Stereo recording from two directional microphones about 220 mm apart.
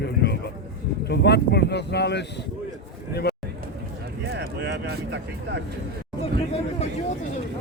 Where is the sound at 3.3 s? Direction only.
45° left (ahead or behind).